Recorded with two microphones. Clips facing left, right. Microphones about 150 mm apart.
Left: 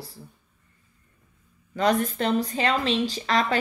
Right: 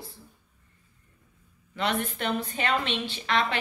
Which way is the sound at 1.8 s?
40° left (ahead or behind).